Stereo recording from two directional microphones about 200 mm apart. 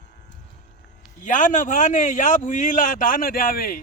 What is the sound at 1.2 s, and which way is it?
A man's voice, 40° left (ahead or behind).